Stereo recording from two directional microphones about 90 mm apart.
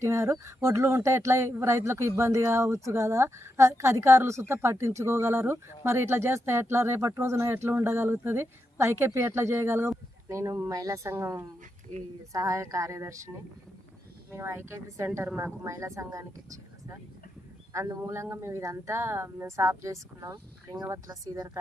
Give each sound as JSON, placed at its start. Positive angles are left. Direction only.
{"t": 0.0, "sound": "a man's voice", "side_deg": -30}
{"t": 18.0, "sound": "speech", "side_deg": -30}